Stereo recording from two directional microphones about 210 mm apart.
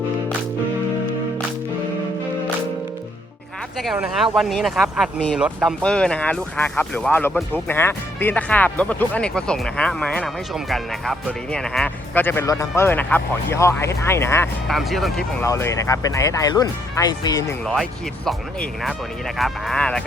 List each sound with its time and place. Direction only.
3.8 s speech: centre (ahead or behind)
14.7 s speech: centre (ahead or behind)
15.4 s speech: 15° left (ahead or behind)
18.3 s speech: centre (ahead or behind)